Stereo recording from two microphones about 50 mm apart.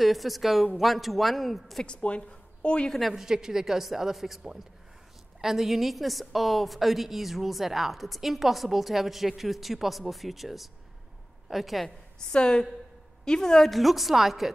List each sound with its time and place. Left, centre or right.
0.0 s a woman's voice: centre
1.9 s speech: left
2.9 s a woman's voice: centre
5.4 s a woman's voice: centre
12.3 s a woman's voice: centre